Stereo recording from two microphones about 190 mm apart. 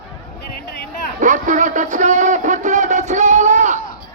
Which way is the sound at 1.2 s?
40° right (ahead or behind).